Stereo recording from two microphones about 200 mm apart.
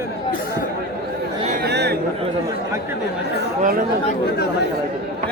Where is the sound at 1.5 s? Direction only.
55° right (ahead or behind).